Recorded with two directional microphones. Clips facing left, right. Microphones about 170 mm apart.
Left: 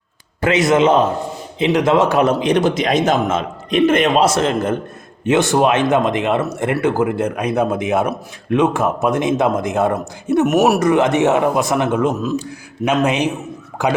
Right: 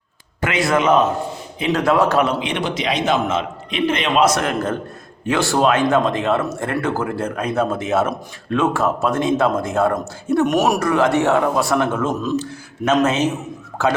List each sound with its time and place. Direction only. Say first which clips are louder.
0.4 s speech: left 4 dB; 25° left (ahead or behind)
2.2 s a man's voice: left 7 dB; 40° left (ahead or behind)
4.2 s a man's voice: left 2 dB; 30° left (ahead or behind)